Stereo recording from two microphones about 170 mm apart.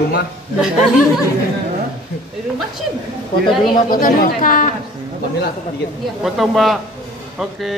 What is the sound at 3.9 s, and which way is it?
Speech, 55° left (ahead or behind).